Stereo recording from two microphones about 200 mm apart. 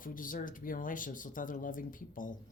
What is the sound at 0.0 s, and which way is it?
Speech, 45° left (ahead or behind).